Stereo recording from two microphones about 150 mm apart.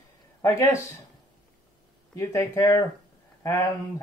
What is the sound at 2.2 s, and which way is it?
A man's voice, 20° left (ahead or behind).